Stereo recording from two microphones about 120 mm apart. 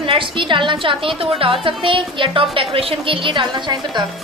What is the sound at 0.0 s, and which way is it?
A woman's voice, 45° right (ahead or behind).